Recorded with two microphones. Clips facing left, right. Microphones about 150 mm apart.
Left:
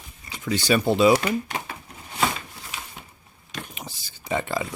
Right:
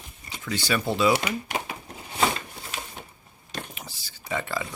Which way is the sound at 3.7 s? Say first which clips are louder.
Left 3 dB; 20° left (ahead or behind).